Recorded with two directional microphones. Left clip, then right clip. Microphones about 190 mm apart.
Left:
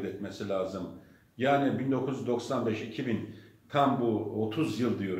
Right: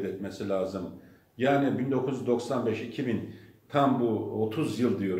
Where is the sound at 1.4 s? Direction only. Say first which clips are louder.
Right 1 dB; 15° right (ahead or behind).